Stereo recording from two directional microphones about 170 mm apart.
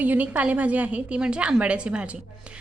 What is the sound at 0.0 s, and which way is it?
A woman's voice, 10° right (ahead or behind).